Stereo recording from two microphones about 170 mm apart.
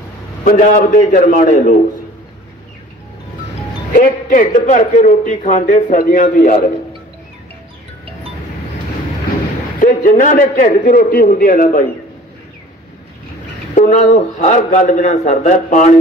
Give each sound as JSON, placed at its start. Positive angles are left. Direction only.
{"t": 0.4, "sound": "a man's voice", "side_deg": 50}
{"t": 3.9, "sound": "a man's voice", "side_deg": 55}
{"t": 9.8, "sound": "a man's voice", "side_deg": 50}
{"t": 13.7, "sound": "a man's voice", "side_deg": 45}